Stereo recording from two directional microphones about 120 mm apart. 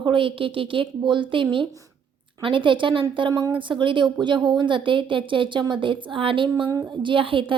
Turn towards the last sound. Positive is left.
turn(degrees=-45)  # may be behind; listen again after turning